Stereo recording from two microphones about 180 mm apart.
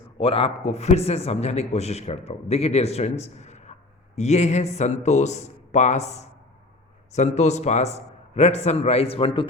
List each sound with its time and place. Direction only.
0.2 s a man's voice: 30° left (ahead or behind)